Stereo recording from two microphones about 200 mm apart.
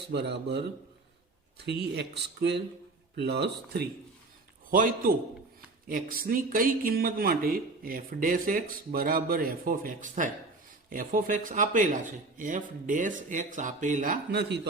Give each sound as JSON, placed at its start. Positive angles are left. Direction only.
{"t": 0.1, "sound": "speech", "side_deg": -60}
{"t": 4.7, "sound": "speech", "side_deg": -45}